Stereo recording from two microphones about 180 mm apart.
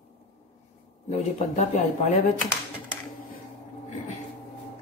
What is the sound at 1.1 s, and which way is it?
Speech, 35° left (ahead or behind).